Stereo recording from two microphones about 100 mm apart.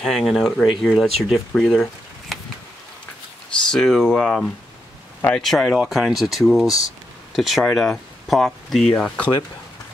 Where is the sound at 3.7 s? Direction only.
5° left (ahead or behind).